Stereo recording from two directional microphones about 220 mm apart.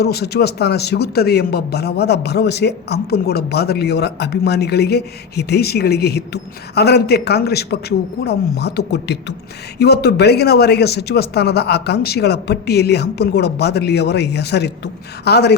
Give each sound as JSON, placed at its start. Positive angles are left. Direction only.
{"t": 0.0, "sound": "speech", "side_deg": 45}